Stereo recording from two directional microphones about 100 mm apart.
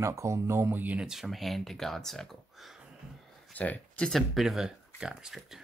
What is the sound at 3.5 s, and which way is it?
Speech, 15° left (ahead or behind).